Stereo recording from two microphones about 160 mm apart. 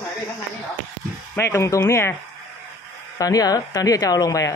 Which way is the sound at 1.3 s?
15° left (ahead or behind).